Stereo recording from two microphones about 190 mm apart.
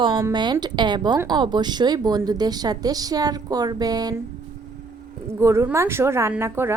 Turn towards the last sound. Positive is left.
turn(degrees=-15)  # may be behind; listen again after turning